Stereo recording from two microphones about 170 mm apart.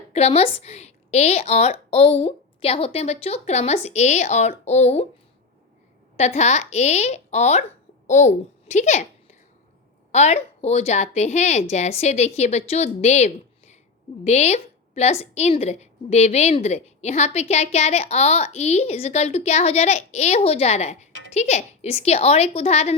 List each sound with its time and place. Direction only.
0.1 s a woman's voice: 35° left (ahead or behind)
6.1 s a woman's voice: 40° left (ahead or behind)